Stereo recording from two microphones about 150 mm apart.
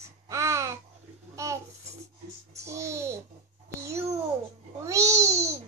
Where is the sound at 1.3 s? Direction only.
20° right (ahead or behind).